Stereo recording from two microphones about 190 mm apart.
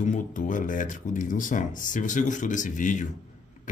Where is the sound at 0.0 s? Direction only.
40° left (ahead or behind).